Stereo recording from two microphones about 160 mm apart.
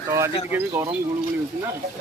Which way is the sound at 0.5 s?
10° right (ahead or behind).